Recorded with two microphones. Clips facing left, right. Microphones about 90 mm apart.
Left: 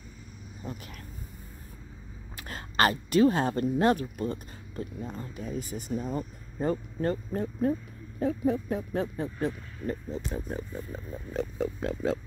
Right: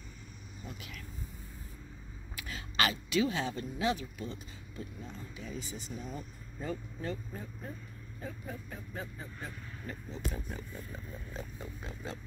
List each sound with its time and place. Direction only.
0.7 s speech: 40° left (ahead or behind)
2.3 s speech: 45° left (ahead or behind)
7.3 s speech: 70° left (ahead or behind)
9.8 s speech: 40° left (ahead or behind)
11.3 s speech: 85° left